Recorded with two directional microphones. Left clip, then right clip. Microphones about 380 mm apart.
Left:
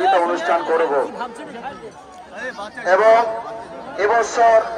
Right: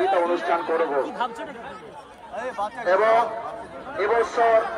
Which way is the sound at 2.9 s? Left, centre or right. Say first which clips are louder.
Left 6 dB; left.